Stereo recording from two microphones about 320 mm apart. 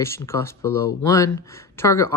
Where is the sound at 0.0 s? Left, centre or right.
Centre.